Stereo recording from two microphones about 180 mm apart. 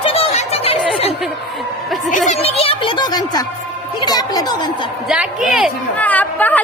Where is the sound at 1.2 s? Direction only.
Centre (ahead or behind).